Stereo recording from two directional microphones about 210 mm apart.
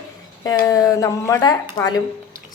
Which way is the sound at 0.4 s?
15° left (ahead or behind).